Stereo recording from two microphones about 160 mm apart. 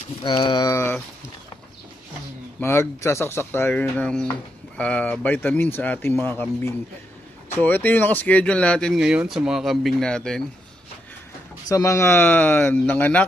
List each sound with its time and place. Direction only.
0.2 s speech: 30° left (ahead or behind)
2.6 s speech: 15° left (ahead or behind)
11.7 s speech: 20° left (ahead or behind)